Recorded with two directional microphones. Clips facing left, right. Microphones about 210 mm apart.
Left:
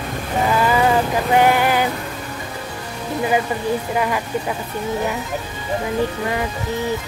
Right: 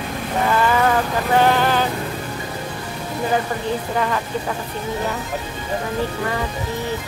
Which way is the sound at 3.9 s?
10° left (ahead or behind).